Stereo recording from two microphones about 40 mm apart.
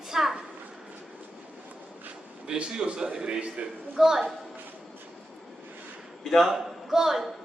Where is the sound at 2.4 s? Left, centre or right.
Right.